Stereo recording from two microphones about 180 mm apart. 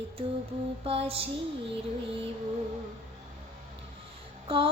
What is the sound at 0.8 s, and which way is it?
Female singing, 30° right (ahead or behind).